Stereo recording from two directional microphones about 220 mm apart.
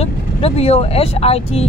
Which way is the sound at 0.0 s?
25° left (ahead or behind).